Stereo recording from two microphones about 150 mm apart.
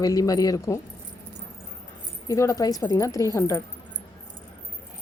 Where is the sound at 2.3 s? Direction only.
20° left (ahead or behind).